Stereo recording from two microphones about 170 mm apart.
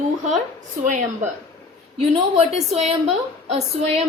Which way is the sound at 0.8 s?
45° right (ahead or behind).